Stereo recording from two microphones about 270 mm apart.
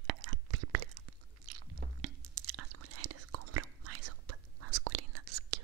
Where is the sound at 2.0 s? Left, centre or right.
Right.